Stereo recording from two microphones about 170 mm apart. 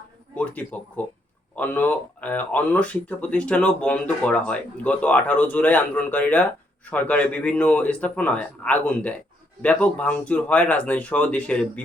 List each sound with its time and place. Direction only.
0.3 s speech: 10° left (ahead or behind)